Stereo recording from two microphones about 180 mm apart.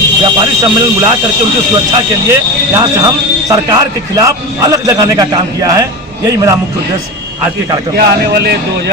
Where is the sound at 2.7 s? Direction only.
20° right (ahead or behind).